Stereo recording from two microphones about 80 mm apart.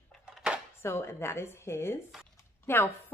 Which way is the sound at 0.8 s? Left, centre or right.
Left.